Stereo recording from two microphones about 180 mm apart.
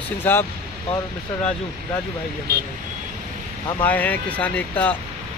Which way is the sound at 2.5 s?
60° right (ahead or behind).